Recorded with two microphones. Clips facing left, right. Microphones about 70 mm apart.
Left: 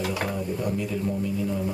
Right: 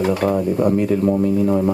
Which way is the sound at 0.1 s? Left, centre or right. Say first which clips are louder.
Right 11 dB; right.